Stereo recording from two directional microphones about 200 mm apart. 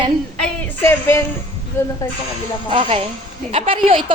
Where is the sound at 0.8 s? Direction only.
10° left (ahead or behind).